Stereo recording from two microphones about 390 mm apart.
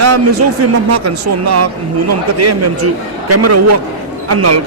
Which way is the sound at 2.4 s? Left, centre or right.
Right.